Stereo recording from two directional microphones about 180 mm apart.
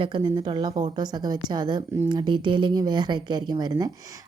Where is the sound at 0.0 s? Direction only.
25° right (ahead or behind).